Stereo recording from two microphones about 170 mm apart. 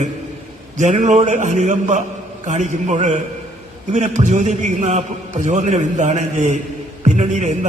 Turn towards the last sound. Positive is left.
turn(degrees=-45)  # may be behind; listen again after turning